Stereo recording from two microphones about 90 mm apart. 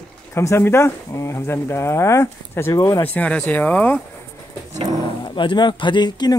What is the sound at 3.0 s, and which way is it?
Speech, 15° left (ahead or behind).